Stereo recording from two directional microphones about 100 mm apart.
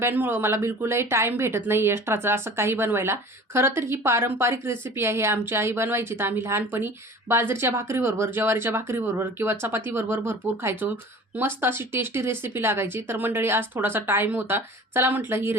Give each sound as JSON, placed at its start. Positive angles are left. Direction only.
{"t": 0.0, "sound": "speech", "side_deg": -20}